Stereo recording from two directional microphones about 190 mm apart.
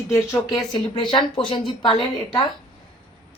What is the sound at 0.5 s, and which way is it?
Speech, 25° left (ahead or behind).